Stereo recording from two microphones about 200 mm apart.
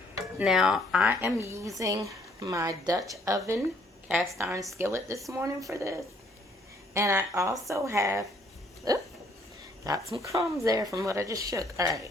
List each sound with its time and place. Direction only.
0.3 s a woman's voice: 5° right (ahead or behind)
9.8 s a woman's voice: 20° right (ahead or behind)